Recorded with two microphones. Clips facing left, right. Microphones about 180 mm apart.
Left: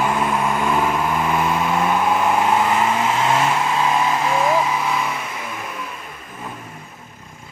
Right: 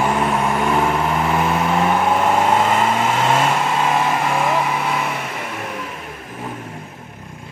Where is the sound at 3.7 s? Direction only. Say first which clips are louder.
Right 1 dB; 55° right (ahead or behind).